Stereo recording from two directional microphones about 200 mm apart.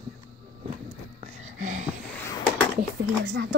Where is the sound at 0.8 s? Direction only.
35° right (ahead or behind).